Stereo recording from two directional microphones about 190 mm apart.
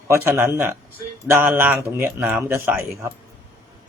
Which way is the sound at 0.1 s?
15° right (ahead or behind).